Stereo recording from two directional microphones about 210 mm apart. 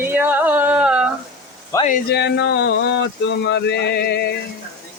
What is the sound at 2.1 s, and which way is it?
Speech, 55° left (ahead or behind).